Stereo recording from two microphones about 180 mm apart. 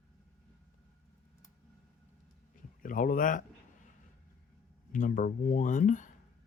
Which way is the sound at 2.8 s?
50° left (ahead or behind).